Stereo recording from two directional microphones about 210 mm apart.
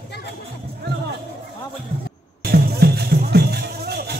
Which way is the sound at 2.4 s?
45° right (ahead or behind).